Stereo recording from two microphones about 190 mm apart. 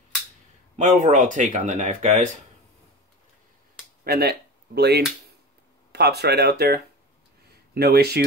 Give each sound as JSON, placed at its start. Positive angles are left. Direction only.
{"t": 0.7, "sound": "speech", "side_deg": -40}
{"t": 4.0, "sound": "speech", "side_deg": -55}